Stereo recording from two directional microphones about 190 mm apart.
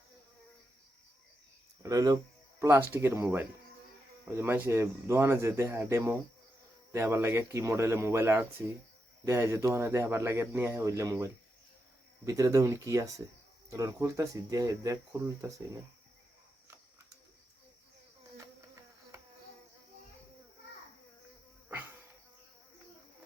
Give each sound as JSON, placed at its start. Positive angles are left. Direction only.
{"t": 1.8, "sound": "speech", "side_deg": -15}
{"t": 21.7, "sound": "insect", "side_deg": -10}